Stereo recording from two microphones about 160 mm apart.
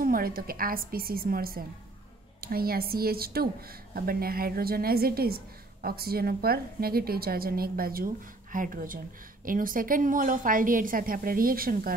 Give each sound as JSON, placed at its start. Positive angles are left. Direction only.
{"t": 0.0, "sound": "a woman's voice", "side_deg": -65}